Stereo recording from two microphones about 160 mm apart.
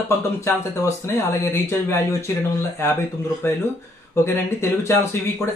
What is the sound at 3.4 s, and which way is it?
Speech, 15° left (ahead or behind).